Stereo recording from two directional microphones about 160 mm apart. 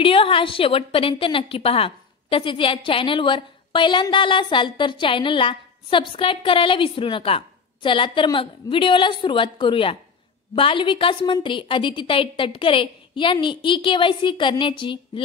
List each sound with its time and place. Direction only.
0.0 s a woman's voice: 35° left (ahead or behind)